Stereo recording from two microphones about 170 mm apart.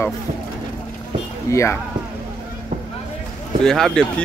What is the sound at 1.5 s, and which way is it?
Speech, 15° left (ahead or behind).